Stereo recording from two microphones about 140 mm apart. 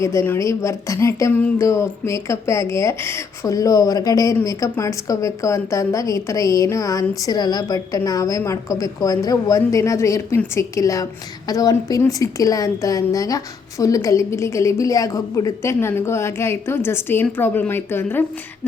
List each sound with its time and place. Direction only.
0.0 s a woman's voice: 20° left (ahead or behind)